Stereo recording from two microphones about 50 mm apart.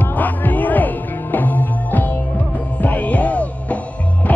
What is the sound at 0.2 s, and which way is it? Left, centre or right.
Music, left.